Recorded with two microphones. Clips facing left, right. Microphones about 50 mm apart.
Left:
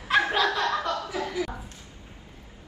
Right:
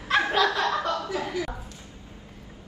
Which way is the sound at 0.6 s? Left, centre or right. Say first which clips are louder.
Right 1 dB; right.